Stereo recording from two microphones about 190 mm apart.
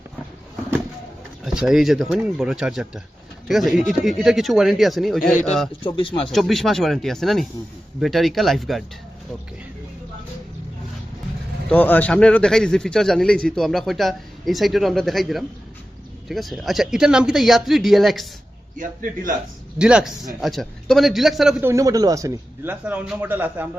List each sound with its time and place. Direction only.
1.5 s a man's voice: centre (ahead or behind)
5.3 s a man's voice: 40° left (ahead or behind)
5.8 s speech: 25° left (ahead or behind)
6.3 s a man's voice: centre (ahead or behind)
11.7 s a man's voice: 10° left (ahead or behind)
19.8 s a man's voice: 5° right (ahead or behind)
21.7 s a man's voice: 20° right (ahead or behind)